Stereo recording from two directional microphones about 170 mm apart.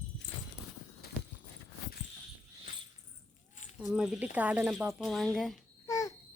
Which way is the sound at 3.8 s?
5° right (ahead or behind).